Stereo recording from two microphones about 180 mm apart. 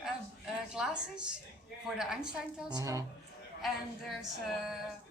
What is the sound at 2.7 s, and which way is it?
Speech, 20° right (ahead or behind).